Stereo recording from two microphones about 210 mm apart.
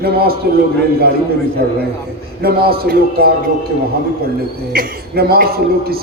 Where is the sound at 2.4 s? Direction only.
45° right (ahead or behind).